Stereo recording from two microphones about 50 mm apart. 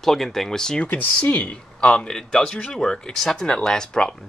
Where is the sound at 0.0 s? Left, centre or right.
Centre.